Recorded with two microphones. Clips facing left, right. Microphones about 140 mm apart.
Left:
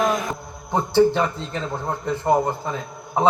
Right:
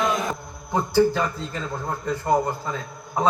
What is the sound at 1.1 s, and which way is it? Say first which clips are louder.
A man's voice: left 3 dB; 25° left (ahead or behind).